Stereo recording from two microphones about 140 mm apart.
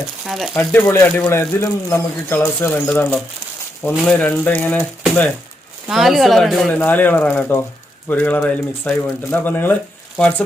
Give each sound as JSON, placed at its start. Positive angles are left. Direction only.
{"t": 0.3, "sound": "speech", "side_deg": 0}
{"t": 0.5, "sound": "speech", "side_deg": 15}
{"t": 5.9, "sound": "speech", "side_deg": 0}
{"t": 6.7, "sound": "speech", "side_deg": 15}